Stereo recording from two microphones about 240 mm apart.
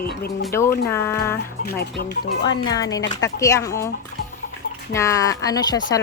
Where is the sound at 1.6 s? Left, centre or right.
Left.